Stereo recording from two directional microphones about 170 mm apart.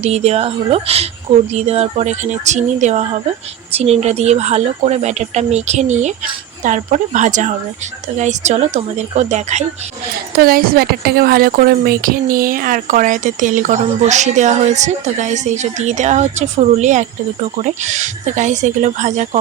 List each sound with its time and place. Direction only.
0.0 s speech: 40° right (ahead or behind)
10.3 s speech: 60° right (ahead or behind); by 19.4 s 45° right (ahead or behind)